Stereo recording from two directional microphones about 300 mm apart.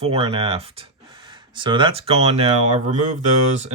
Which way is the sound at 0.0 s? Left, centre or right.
Centre.